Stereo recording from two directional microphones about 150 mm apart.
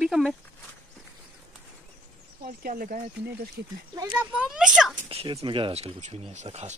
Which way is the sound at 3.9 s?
20° right (ahead or behind).